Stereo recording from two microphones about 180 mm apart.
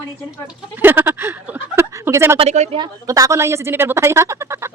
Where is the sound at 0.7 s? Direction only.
10° right (ahead or behind).